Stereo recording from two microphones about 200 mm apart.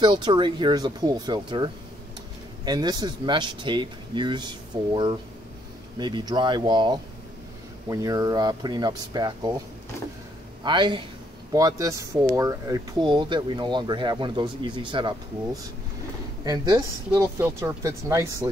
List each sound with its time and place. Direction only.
0.0 s speech: 20° right (ahead or behind)
10.6 s speech: 25° right (ahead or behind)